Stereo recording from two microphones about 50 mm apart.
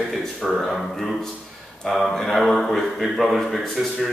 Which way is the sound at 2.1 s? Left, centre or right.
Centre.